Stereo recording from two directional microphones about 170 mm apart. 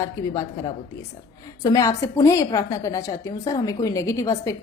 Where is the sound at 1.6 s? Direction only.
20° left (ahead or behind).